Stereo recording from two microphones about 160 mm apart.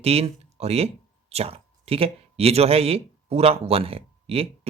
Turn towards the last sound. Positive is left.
turn(degrees=-40)  # may be behind; listen again after turning